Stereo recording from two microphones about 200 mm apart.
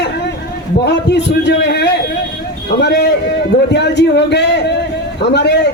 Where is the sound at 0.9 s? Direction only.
60° left (ahead or behind).